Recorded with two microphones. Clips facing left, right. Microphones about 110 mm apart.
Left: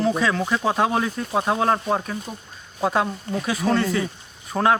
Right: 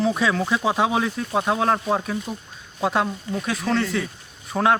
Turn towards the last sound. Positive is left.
turn(degrees=0)  # may be behind; listen again after turning